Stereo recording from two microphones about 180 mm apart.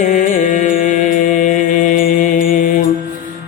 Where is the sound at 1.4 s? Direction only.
45° left (ahead or behind).